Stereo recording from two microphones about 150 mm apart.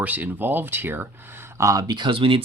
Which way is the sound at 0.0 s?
10° right (ahead or behind).